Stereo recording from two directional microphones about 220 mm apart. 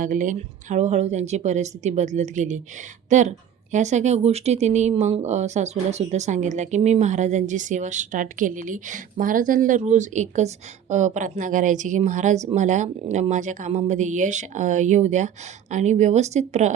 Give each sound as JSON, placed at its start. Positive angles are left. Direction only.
{"t": 0.0, "sound": "a woman's voice", "side_deg": -35}